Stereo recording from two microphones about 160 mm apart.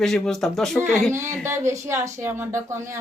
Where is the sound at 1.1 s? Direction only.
15° right (ahead or behind).